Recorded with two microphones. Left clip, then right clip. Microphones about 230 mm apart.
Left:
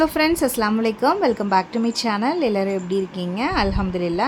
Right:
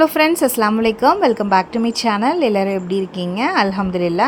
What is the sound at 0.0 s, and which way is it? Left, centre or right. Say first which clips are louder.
A woman's voice: right 5 dB; centre.